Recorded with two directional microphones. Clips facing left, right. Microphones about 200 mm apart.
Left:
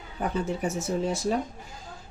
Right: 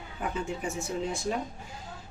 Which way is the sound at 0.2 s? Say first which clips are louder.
Left 5 dB; 40° left (ahead or behind).